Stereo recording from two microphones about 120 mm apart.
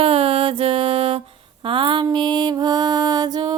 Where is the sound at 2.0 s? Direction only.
40° right (ahead or behind).